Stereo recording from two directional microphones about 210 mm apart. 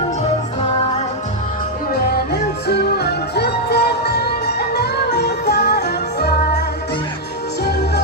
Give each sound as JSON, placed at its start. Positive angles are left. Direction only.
{"t": 0.6, "sound": "music", "side_deg": 30}
{"t": 2.0, "sound": "music", "side_deg": 50}
{"t": 7.6, "sound": "music", "side_deg": 50}